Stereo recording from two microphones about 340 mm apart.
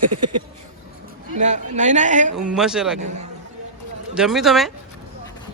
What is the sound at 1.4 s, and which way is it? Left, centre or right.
Speech, right.